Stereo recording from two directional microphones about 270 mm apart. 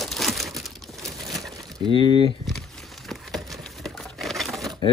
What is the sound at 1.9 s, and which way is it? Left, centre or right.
Speech, centre.